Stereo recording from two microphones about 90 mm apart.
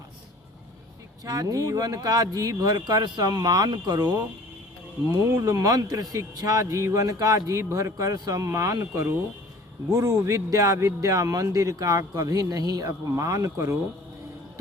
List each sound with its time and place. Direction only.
1.2 s speech: 45° right (ahead or behind)
5.1 s a man's voice: 35° right (ahead or behind)